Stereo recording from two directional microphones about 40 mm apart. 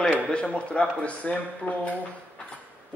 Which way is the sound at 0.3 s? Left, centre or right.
Left.